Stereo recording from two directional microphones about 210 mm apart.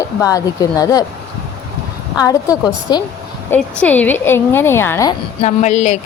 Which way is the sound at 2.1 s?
15° left (ahead or behind).